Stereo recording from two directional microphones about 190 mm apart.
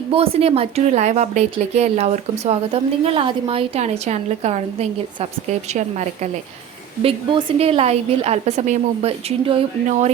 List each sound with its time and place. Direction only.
0.1 s a woman's voice: 30° right (ahead or behind)